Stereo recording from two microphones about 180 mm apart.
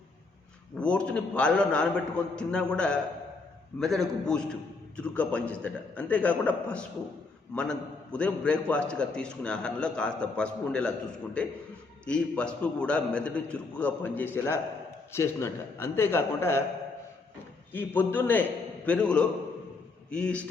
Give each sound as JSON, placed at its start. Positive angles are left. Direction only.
{"t": 0.8, "sound": "a man's voice", "side_deg": 5}
{"t": 12.0, "sound": "a man's voice", "side_deg": 5}
{"t": 17.7, "sound": "a man's voice", "side_deg": 10}